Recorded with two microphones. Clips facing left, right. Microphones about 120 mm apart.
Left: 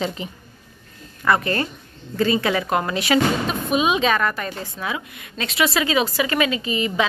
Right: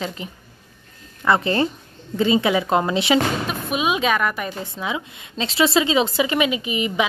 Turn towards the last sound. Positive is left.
turn(degrees=-15)  # may be behind; listen again after turning